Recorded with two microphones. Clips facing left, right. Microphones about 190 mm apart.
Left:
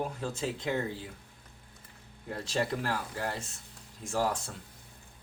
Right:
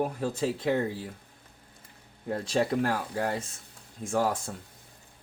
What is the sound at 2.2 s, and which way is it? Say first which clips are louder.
Speech: right 5 dB; 50° right (ahead or behind).